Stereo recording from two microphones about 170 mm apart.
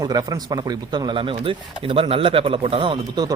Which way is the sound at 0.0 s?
25° right (ahead or behind).